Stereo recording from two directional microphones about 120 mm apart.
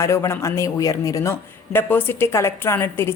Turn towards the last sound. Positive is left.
turn(degrees=20)  # may be behind; listen again after turning